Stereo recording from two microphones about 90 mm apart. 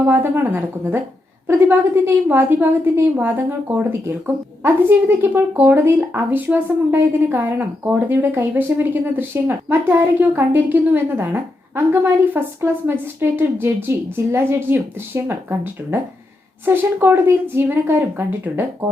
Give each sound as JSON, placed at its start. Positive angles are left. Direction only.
{"t": 0.0, "sound": "a woman's voice", "side_deg": -25}